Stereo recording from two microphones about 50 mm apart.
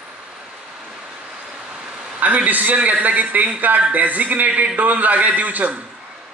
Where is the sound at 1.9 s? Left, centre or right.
Centre.